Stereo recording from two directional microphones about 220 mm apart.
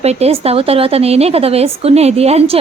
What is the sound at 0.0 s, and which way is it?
A woman's voice, 30° right (ahead or behind).